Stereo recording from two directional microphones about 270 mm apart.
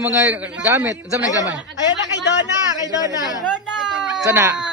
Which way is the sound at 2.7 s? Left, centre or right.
Centre.